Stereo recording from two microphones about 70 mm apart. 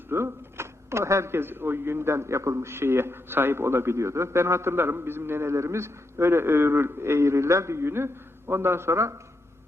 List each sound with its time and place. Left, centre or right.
0.1 s speech: right